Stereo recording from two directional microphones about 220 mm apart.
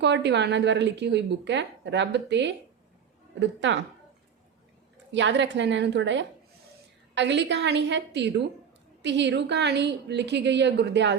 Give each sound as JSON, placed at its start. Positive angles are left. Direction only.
{"t": 0.0, "sound": "a woman's voice", "side_deg": -50}
{"t": 5.1, "sound": "a woman's voice", "side_deg": -55}